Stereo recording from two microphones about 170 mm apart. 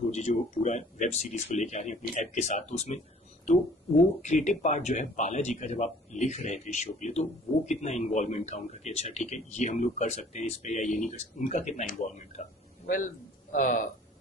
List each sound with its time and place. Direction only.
0.1 s speech: 40° left (ahead or behind)
4.2 s speech: 45° left (ahead or behind)